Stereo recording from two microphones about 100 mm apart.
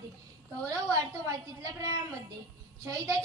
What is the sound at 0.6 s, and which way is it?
Speech, 35° right (ahead or behind).